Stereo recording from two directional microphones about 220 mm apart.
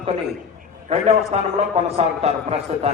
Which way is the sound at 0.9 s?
30° right (ahead or behind).